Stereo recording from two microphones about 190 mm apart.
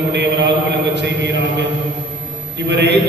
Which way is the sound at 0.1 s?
65° right (ahead or behind).